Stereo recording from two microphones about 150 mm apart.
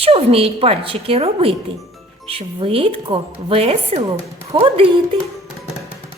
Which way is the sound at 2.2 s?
40° right (ahead or behind).